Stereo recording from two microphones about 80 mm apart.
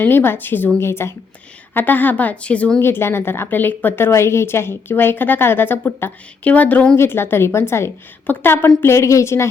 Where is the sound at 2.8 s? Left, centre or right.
Left.